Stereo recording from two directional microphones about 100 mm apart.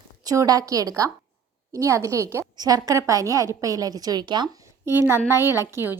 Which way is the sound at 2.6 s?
40° right (ahead or behind).